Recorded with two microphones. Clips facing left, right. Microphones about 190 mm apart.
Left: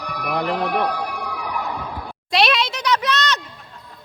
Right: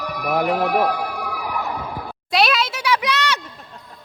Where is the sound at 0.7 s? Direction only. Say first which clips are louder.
Right 2 dB; 5° right (ahead or behind).